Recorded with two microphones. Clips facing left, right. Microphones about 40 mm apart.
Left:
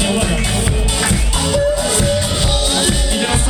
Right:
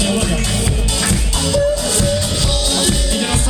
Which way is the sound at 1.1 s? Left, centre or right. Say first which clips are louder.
Even; left.